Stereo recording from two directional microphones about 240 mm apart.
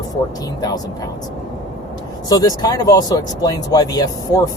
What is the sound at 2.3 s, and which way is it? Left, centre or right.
Speech, centre.